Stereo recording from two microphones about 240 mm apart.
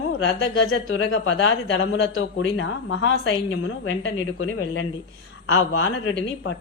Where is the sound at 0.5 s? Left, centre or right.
Left.